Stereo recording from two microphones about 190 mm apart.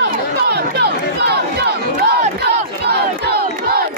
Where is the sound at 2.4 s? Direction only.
60° right (ahead or behind).